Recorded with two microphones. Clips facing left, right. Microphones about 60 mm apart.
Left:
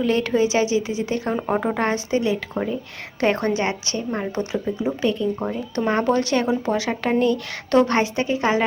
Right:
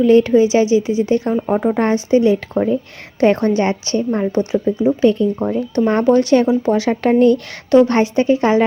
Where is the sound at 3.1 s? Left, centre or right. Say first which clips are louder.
Right 7 dB; left.